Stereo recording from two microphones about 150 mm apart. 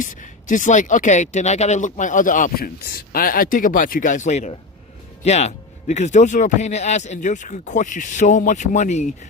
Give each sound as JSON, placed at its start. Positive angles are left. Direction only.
{"t": 0.0, "sound": "speech", "side_deg": 60}